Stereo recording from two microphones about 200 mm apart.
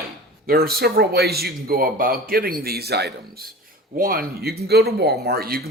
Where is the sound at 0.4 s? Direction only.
50° right (ahead or behind).